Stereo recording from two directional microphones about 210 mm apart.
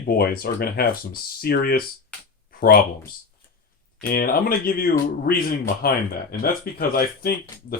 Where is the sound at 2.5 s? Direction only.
45° left (ahead or behind).